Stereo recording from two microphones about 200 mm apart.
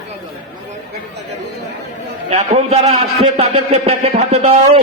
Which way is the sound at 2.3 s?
35° right (ahead or behind).